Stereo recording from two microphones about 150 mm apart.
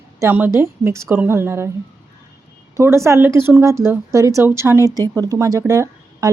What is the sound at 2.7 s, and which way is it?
A woman's voice, 20° right (ahead or behind).